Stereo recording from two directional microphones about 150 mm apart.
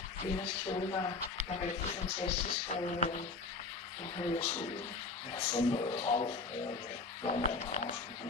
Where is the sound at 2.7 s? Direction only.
55° left (ahead or behind).